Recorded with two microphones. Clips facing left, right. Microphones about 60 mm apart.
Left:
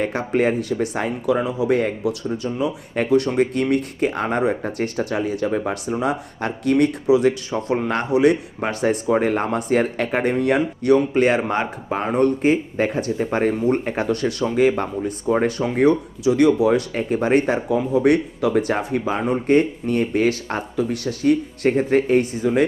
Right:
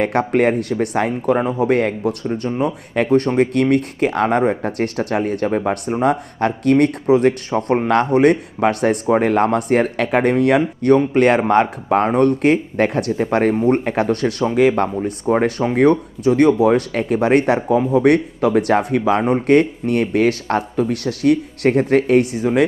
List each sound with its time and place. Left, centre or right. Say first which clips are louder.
0.0 s speech: right 4 dB; right
10.8 s speech: right 3 dB; right
13.6 s speech: right 4 dB; right